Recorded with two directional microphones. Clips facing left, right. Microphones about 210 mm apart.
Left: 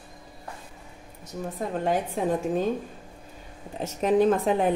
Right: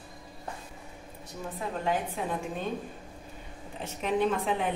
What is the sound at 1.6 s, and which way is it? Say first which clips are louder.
A woman's voice: left 4 dB; 40° left (ahead or behind).